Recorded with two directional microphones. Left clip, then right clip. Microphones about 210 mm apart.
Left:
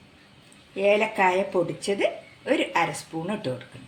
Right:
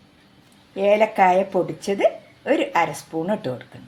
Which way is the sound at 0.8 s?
50° right (ahead or behind).